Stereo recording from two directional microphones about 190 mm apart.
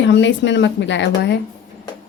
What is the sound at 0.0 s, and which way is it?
Speech, 70° left (ahead or behind).